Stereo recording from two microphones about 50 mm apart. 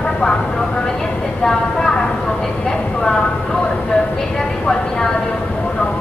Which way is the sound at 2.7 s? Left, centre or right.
Centre.